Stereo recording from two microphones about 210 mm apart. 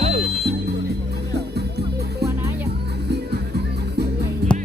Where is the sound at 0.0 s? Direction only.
30° right (ahead or behind).